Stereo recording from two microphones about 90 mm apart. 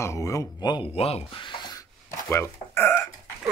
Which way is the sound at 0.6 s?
55° left (ahead or behind).